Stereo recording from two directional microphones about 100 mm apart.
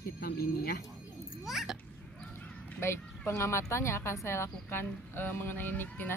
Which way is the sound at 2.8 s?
25° left (ahead or behind).